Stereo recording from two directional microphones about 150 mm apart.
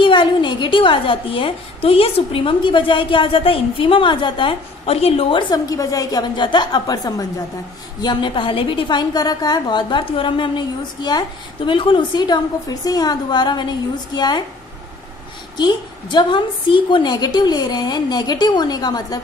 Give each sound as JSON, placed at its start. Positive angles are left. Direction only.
{"t": 0.0, "sound": "a woman's voice", "side_deg": 35}
{"t": 5.5, "sound": "a woman's voice", "side_deg": 25}
{"t": 15.5, "sound": "a woman's voice", "side_deg": 30}